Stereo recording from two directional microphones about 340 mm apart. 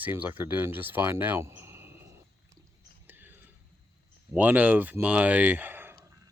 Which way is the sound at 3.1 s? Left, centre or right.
Centre.